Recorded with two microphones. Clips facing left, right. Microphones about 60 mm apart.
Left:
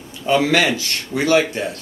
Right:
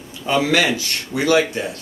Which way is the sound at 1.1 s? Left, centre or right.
Left.